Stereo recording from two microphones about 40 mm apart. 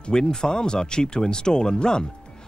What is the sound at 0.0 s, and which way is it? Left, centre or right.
Speech, centre.